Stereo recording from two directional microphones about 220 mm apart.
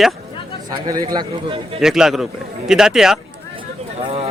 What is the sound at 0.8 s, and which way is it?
Speech, 15° right (ahead or behind).